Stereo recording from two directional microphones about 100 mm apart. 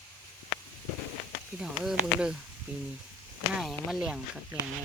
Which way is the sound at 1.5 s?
5° right (ahead or behind).